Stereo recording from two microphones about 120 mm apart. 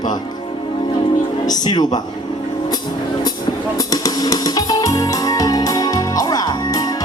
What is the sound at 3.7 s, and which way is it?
Music, 30° left (ahead or behind).